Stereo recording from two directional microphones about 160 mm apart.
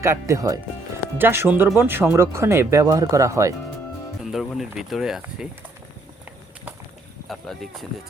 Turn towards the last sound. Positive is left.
turn(degrees=0)  # may be behind; listen again after turning